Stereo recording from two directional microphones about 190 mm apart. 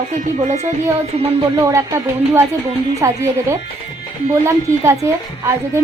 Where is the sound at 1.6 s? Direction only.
15° right (ahead or behind).